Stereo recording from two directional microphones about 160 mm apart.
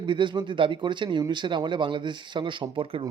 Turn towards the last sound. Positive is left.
turn(degrees=-35)  # may be behind; listen again after turning